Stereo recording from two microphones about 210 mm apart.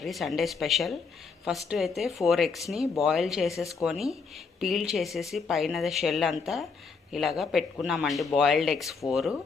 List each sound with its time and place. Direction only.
0.0 s speech: centre (ahead or behind)